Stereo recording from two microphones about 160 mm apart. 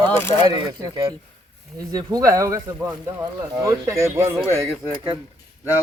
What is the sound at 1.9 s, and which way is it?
Speech, 20° right (ahead or behind).